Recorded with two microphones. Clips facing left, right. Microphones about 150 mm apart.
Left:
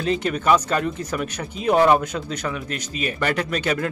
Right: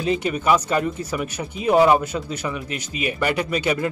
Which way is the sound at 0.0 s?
10° right (ahead or behind).